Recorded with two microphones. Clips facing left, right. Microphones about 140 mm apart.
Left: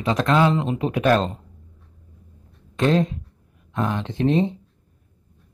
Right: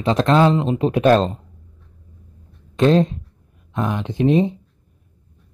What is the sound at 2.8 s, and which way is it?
Speech, 25° right (ahead or behind).